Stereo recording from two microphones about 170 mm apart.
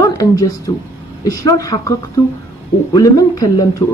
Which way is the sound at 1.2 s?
20° left (ahead or behind).